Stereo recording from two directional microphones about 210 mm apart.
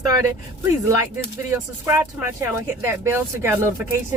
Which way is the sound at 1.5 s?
10° right (ahead or behind).